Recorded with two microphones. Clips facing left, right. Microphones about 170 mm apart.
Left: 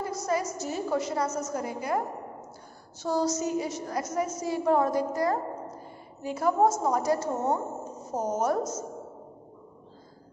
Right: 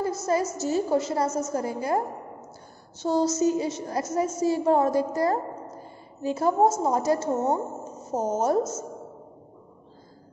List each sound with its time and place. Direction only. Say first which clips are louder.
0.0 s a woman's voice: right 4 dB; 25° right (ahead or behind)